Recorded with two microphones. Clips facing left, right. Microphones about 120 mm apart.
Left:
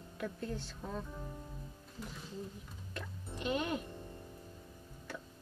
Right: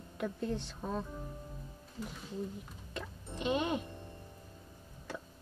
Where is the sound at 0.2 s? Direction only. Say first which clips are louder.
Right 4 dB; 20° right (ahead or behind).